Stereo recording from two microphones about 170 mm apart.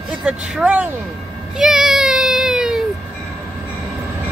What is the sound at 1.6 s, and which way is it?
Child singing, 5° right (ahead or behind).